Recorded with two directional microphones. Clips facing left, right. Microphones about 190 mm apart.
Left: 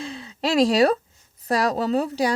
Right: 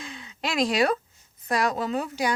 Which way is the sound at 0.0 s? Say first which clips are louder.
Left 6 dB; 35° left (ahead or behind).